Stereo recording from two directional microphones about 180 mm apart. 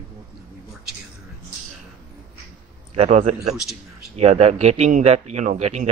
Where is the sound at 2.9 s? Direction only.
35° right (ahead or behind).